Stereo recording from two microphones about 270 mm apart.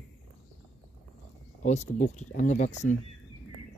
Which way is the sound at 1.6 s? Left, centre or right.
Left.